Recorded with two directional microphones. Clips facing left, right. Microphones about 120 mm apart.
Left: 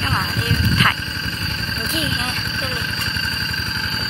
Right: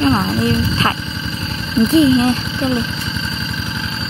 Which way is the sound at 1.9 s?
30° right (ahead or behind).